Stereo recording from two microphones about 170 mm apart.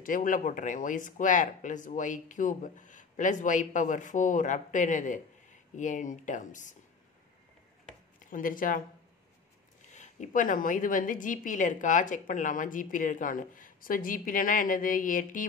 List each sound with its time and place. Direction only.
0.0 s speech: 50° left (ahead or behind)
8.2 s speech: 55° left (ahead or behind)